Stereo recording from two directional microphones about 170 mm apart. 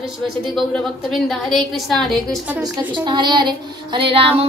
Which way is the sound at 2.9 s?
25° right (ahead or behind).